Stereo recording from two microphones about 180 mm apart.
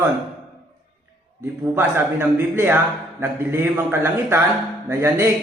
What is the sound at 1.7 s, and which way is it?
A man's voice, 10° right (ahead or behind).